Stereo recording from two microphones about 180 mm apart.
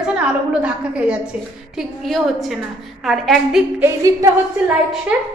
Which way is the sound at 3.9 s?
15° right (ahead or behind).